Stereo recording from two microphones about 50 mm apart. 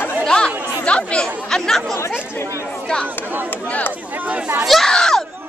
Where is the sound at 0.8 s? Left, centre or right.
Left.